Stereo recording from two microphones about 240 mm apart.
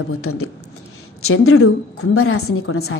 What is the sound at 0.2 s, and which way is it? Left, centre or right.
A woman's voice, left.